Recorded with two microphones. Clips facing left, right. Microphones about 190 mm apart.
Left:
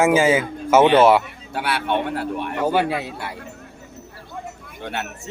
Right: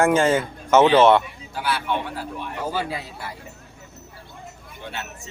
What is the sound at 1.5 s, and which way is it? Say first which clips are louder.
Speech: left 3 dB; 65° left (ahead or behind).